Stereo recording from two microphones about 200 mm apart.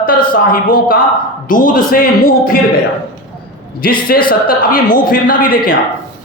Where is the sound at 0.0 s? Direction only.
45° left (ahead or behind).